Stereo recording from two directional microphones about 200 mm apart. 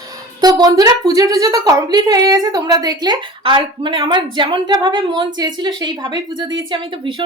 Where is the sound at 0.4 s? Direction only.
20° right (ahead or behind).